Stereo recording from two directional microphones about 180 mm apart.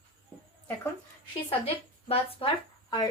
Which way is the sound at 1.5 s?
35° left (ahead or behind).